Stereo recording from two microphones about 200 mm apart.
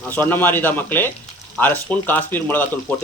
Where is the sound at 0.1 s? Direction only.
10° left (ahead or behind).